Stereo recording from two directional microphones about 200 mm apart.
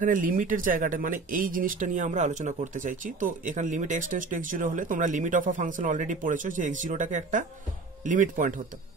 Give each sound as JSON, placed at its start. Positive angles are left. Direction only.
{"t": 0.0, "sound": "speech", "side_deg": -45}